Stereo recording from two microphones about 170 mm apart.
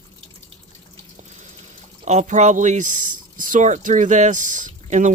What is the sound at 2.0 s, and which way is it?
Speech, 45° right (ahead or behind).